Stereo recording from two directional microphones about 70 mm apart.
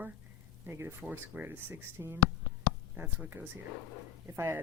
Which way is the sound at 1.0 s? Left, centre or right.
Right.